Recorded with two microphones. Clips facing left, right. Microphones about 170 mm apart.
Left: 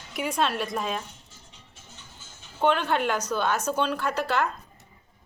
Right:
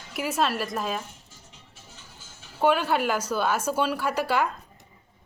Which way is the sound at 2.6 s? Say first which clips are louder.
Right 1 dB; 5° right (ahead or behind).